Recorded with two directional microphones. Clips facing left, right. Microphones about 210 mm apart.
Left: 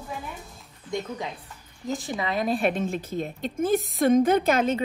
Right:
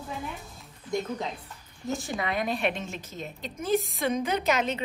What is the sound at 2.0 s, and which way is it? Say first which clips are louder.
Speech: left 4 dB; 25° left (ahead or behind).